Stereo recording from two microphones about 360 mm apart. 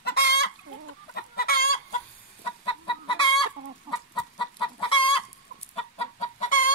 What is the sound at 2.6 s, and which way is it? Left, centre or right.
Chicken, centre.